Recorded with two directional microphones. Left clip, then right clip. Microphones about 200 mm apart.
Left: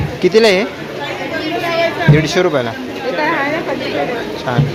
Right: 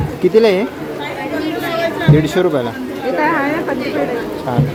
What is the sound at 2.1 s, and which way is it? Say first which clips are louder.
Speech: right 2 dB; 15° right (ahead or behind).